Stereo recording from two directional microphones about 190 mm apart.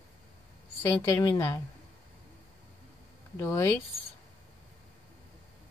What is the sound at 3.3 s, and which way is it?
Speech, 15° left (ahead or behind).